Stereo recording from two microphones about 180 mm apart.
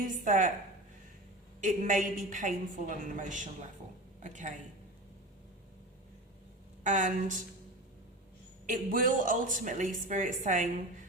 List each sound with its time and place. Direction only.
0.0 s speech: 45° right (ahead or behind)
1.6 s a woman's voice: 45° right (ahead or behind)
6.8 s speech: 45° right (ahead or behind)
8.7 s speech: 50° right (ahead or behind)